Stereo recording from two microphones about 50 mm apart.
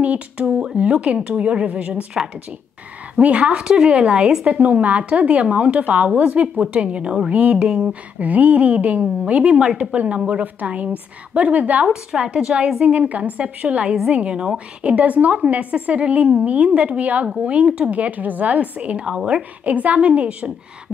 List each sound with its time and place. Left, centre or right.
0.0 s a woman's voice: right
2.2 s speech: centre
3.2 s speech: right
4.5 s a woman's voice: right
8.2 s a woman's voice: right
11.9 s speech: centre
12.8 s a woman's voice: right